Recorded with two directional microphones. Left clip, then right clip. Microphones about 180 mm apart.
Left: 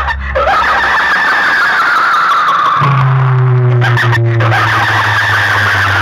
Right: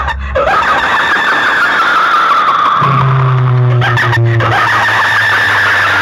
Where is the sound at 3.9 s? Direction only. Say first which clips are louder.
Right 1 dB; 45° right (ahead or behind).